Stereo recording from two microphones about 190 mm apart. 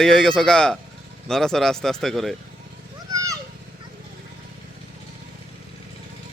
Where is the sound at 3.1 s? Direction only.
20° right (ahead or behind).